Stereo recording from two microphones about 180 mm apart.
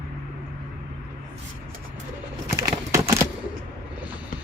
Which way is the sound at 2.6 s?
15° right (ahead or behind).